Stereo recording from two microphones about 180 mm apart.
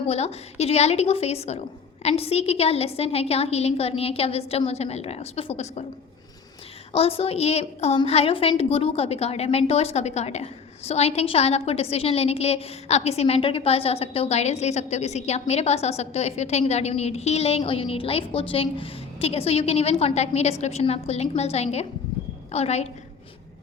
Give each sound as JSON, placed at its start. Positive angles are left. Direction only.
{"t": 0.1, "sound": "a woman's voice", "side_deg": 35}
{"t": 6.9, "sound": "a woman's voice", "side_deg": 35}